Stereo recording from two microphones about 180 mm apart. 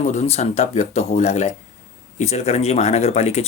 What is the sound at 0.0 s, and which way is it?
Speech, 40° left (ahead or behind).